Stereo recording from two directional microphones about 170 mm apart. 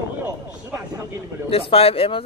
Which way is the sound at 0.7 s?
15° right (ahead or behind).